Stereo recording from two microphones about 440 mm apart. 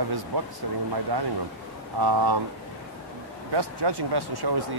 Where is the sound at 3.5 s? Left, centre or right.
Right.